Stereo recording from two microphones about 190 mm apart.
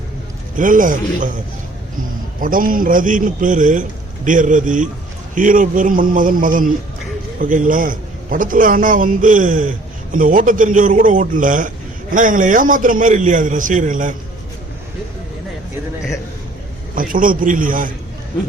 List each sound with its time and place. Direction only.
0.5 s a man's voice: 45° right (ahead or behind)
2.4 s a man's voice: 45° right (ahead or behind)
16.9 s a man's voice: 45° right (ahead or behind)